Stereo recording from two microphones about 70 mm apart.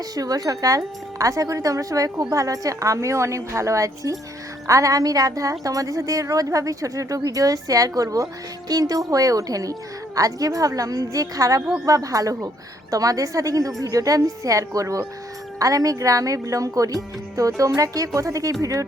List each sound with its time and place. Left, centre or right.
0.2 s a woman's voice: right